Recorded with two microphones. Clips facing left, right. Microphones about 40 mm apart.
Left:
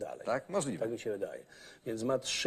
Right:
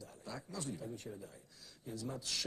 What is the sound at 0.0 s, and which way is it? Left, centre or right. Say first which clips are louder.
A man's voice: left 14 dB; left.